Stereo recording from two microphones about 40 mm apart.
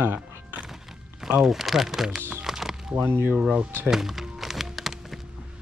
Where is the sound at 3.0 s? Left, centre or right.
Right.